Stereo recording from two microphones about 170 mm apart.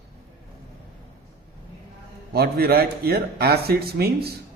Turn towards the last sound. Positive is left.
turn(degrees=-65)  # may be behind; listen again after turning